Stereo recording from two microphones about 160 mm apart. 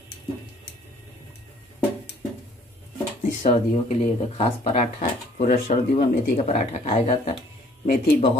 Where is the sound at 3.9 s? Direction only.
40° left (ahead or behind).